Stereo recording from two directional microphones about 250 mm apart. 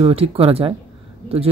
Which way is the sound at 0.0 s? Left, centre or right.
Right.